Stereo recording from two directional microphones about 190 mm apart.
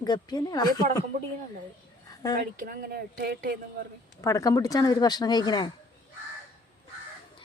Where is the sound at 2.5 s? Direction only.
50° right (ahead or behind).